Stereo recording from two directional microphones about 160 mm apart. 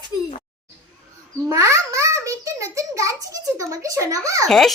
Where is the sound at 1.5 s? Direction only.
20° right (ahead or behind).